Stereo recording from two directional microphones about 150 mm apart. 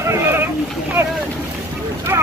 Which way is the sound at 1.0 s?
15° right (ahead or behind).